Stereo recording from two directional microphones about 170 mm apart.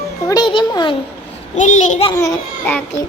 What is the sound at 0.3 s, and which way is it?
Speech, 25° left (ahead or behind).